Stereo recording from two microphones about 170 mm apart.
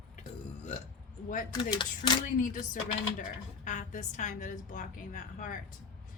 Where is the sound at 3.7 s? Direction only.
45° left (ahead or behind).